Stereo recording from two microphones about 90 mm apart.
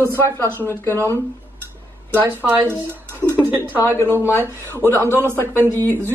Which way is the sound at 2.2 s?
25° right (ahead or behind).